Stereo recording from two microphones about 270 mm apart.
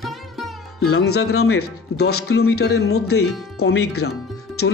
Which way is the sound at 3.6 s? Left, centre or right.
Left.